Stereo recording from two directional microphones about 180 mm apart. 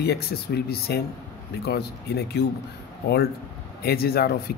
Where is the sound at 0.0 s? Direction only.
65° left (ahead or behind).